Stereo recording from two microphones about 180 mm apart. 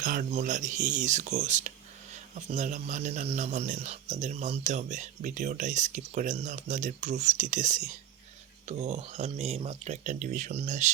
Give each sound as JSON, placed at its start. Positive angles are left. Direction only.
{"t": 0.0, "sound": "a man's voice", "side_deg": -45}